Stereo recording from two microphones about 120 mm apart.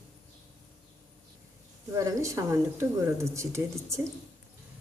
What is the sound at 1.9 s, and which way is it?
Speech, 25° right (ahead or behind).